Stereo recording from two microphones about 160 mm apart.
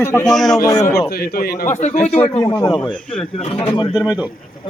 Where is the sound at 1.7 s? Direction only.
45° left (ahead or behind).